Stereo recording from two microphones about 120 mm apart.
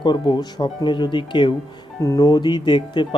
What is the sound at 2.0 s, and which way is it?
Speech, 30° left (ahead or behind).